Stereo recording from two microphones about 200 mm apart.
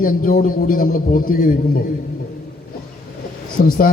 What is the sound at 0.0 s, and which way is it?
A man's voice, 45° left (ahead or behind).